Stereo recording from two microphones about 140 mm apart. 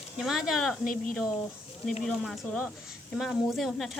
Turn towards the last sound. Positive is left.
turn(degrees=0)  # may be behind; listen again after turning